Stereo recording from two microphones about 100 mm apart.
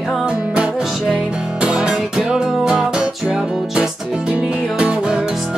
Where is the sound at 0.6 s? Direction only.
10° right (ahead or behind).